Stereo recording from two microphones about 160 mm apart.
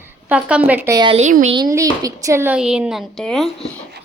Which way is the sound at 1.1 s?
50° right (ahead or behind).